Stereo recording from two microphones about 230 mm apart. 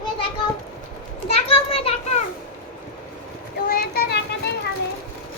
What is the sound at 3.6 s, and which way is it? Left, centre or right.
Children playing, left.